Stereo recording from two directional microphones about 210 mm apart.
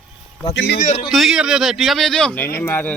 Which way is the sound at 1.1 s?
Centre (ahead or behind).